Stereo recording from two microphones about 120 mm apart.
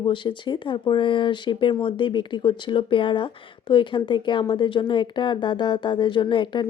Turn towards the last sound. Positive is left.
turn(degrees=45)  # may be behind; listen again after turning